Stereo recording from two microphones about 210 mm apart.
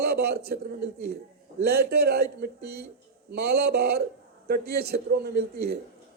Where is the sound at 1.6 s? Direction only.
50° right (ahead or behind).